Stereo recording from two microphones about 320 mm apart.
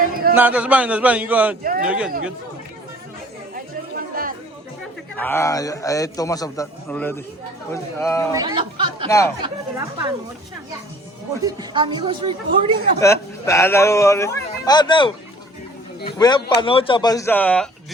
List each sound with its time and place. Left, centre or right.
0.0 s a sound: right
0.3 s a man's voice: centre
3.5 s chatter: right
5.1 s a man's voice: centre
8.3 s speech: centre
9.0 s speech: centre
9.4 s speech: centre
11.4 s speech: centre
13.0 s speech: centre